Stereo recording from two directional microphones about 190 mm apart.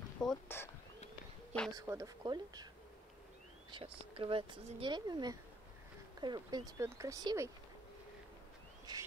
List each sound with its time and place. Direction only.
0.2 s speech: 5° left (ahead or behind)
1.7 s speech: 20° right (ahead or behind)
3.7 s speech: 30° right (ahead or behind)
8.9 s speech: 20° right (ahead or behind)